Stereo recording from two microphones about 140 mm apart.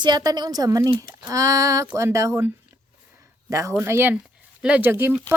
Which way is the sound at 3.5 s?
25° right (ahead or behind).